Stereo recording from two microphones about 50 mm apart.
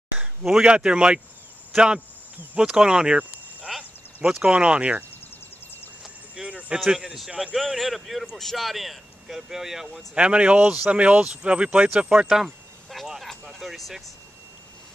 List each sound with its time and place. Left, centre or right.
0.2 s speech: centre
2.6 s speech: centre
3.7 s a sound: centre
4.4 s speech: right
6.3 s cricket: centre
6.9 s speech: centre
7.7 s speech: centre
10.1 s speech: right; by 14.0 s centre